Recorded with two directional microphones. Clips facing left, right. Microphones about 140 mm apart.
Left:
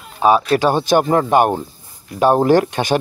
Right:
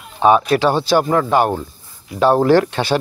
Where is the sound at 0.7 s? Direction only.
15° left (ahead or behind).